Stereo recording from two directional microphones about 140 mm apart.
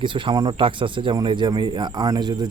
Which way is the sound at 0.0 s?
35° right (ahead or behind).